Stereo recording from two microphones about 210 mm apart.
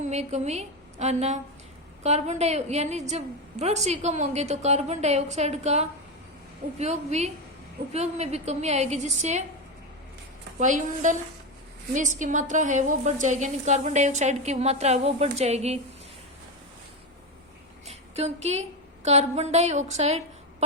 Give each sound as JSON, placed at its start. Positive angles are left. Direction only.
{"t": 0.0, "sound": "a woman's voice", "side_deg": -35}
{"t": 10.6, "sound": "a woman's voice", "side_deg": -35}
{"t": 17.8, "sound": "a sound", "side_deg": -30}
{"t": 19.0, "sound": "a woman's voice", "side_deg": -30}